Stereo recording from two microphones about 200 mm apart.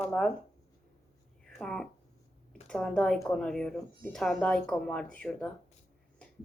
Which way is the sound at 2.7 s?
5° left (ahead or behind).